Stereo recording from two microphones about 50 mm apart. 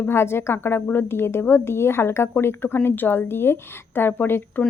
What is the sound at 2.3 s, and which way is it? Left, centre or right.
Speech, left.